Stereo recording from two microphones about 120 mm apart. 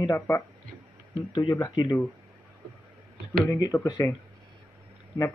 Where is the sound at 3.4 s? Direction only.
25° left (ahead or behind).